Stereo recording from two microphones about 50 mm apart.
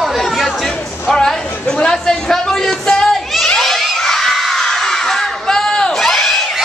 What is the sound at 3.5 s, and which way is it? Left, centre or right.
Children shouting, centre.